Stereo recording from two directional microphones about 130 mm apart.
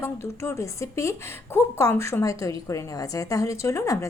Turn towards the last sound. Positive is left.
turn(degrees=25)  # may be behind; listen again after turning